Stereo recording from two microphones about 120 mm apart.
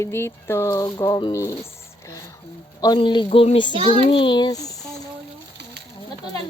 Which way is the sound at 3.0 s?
45° left (ahead or behind).